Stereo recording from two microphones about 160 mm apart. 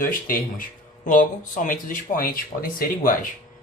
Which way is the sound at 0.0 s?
60° left (ahead or behind).